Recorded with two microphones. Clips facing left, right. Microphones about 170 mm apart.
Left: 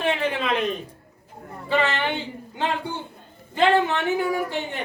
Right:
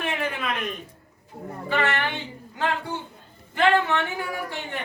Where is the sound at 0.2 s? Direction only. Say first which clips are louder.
Left 5 dB; 25° left (ahead or behind).